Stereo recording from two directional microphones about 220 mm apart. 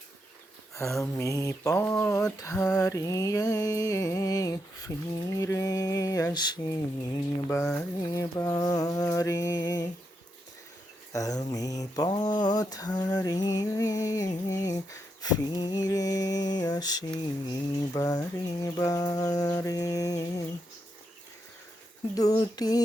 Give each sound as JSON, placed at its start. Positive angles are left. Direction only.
{"t": 0.8, "sound": "mantra", "side_deg": 15}
{"t": 7.6, "sound": "a sound", "side_deg": 5}
{"t": 8.0, "sound": "mantra", "side_deg": 15}
{"t": 11.1, "sound": "mantra", "side_deg": 15}
{"t": 22.1, "sound": "mantra", "side_deg": 15}